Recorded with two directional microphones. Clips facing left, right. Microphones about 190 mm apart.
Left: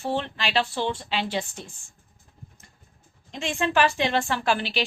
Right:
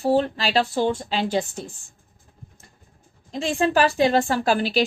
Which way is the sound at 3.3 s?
35° right (ahead or behind).